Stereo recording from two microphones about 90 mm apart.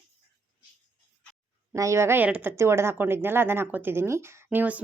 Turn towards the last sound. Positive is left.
turn(degrees=-20)  # may be behind; listen again after turning